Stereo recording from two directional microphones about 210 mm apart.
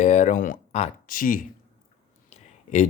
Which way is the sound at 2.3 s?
35° left (ahead or behind).